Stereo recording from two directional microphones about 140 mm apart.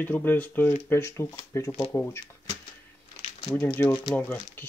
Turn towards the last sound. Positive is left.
turn(degrees=15)  # may be behind; listen again after turning